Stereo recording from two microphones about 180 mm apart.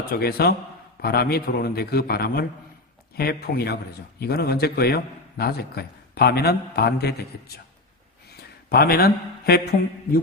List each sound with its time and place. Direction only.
0.1 s a man's voice: 60° left (ahead or behind)